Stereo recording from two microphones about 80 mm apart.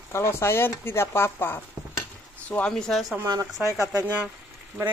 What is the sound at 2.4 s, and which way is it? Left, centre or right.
Speech, centre.